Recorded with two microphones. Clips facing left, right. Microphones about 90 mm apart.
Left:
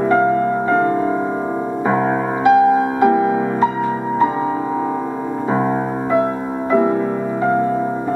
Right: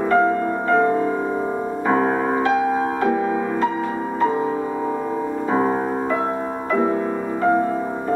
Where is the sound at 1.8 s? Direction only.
5° left (ahead or behind).